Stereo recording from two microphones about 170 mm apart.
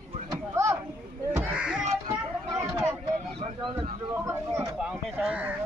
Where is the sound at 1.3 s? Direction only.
10° right (ahead or behind).